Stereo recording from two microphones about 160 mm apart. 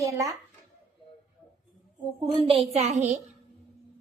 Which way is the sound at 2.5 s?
40° right (ahead or behind).